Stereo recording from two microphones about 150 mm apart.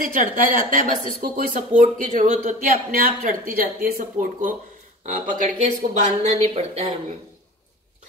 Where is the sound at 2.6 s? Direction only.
70° right (ahead or behind).